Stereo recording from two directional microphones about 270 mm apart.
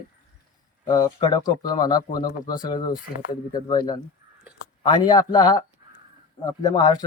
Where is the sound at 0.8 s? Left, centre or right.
Centre.